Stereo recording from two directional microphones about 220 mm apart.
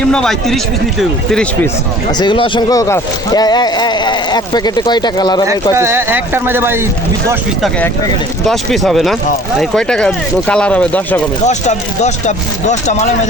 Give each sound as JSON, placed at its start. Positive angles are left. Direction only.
{"t": 0.1, "sound": "speech", "side_deg": 5}
{"t": 2.1, "sound": "speech", "side_deg": 20}
{"t": 5.7, "sound": "speech", "side_deg": -10}
{"t": 8.4, "sound": "speech", "side_deg": 0}
{"t": 11.4, "sound": "speech", "side_deg": 30}